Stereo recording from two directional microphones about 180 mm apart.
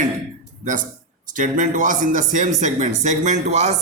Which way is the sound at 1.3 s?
45° right (ahead or behind).